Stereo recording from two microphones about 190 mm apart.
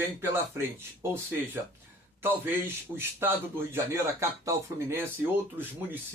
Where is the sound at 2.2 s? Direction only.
10° right (ahead or behind).